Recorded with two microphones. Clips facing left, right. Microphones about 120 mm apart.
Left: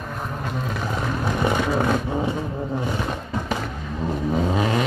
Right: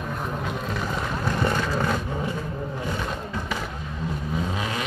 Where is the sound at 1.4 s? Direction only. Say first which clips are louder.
Left 4 dB; 15° left (ahead or behind).